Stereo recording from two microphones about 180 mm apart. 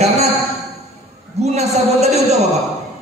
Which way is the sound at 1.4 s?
35° right (ahead or behind).